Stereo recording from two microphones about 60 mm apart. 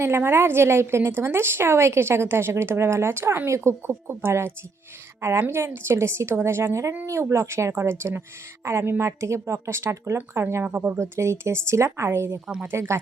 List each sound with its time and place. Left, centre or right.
0.0 s a woman's voice: right
10.6 s a woman's voice: right
10.9 s a woman's voice: right